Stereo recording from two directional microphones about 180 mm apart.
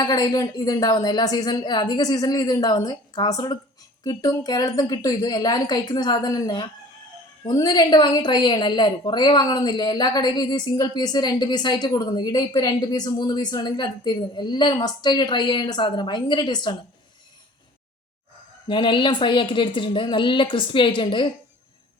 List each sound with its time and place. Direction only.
0.0 s a woman's voice: 20° left (ahead or behind)
18.7 s a woman's voice: 25° left (ahead or behind)